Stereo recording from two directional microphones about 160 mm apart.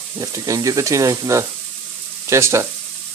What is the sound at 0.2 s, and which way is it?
Speech, 20° right (ahead or behind).